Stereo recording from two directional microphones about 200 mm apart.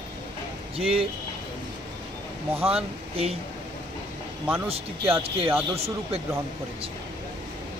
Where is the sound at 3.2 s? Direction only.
30° right (ahead or behind).